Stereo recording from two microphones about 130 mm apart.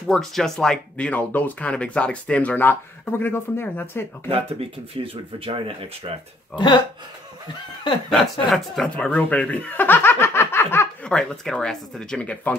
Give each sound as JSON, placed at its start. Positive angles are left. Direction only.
{"t": 0.0, "sound": "speech", "side_deg": 0}
{"t": 4.3, "sound": "speech", "side_deg": -50}
{"t": 8.1, "sound": "speech", "side_deg": 0}
{"t": 11.1, "sound": "speech", "side_deg": 5}